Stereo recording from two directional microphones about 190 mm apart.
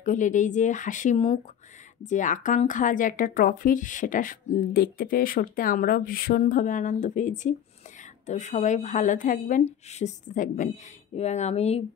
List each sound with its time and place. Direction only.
0.0 s a woman's voice: 40° left (ahead or behind)